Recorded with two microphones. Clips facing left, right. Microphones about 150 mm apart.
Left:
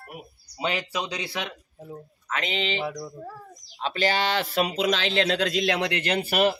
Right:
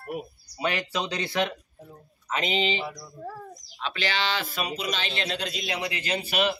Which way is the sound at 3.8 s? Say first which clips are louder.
Left 4 dB; 40° left (ahead or behind).